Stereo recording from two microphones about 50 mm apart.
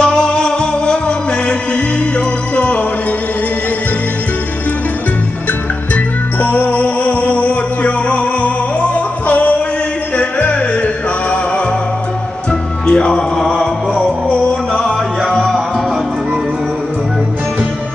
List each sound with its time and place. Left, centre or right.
0.0 s music: centre
6.4 s music: left
12.8 s music: centre
15.3 s music: centre